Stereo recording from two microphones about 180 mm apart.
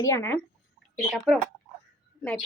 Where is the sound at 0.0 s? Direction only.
15° left (ahead or behind).